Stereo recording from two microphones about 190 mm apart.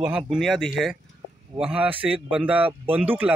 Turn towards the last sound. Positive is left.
turn(degrees=-10)  # may be behind; listen again after turning